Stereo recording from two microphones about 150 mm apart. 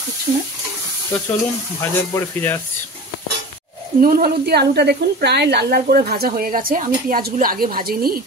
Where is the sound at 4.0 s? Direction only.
80° right.